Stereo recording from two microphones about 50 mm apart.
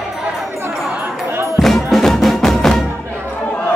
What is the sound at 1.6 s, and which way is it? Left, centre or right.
Music, centre.